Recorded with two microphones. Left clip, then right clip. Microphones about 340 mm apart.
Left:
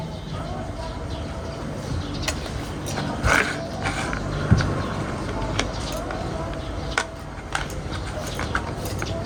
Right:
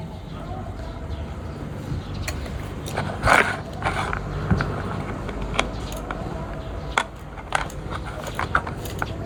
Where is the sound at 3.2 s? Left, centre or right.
Centre.